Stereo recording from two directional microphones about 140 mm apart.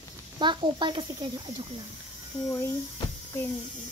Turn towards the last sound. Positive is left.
turn(degrees=20)  # may be behind; listen again after turning